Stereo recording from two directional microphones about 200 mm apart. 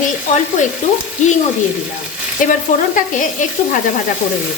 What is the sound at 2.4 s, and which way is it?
Speech, 40° left (ahead or behind).